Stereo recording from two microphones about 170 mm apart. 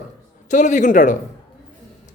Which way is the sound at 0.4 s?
45° left (ahead or behind).